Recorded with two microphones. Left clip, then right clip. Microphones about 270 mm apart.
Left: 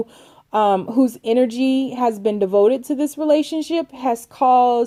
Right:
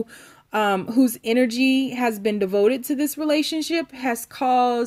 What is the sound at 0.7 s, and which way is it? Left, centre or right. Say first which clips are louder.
Speech: left 3 dB; right.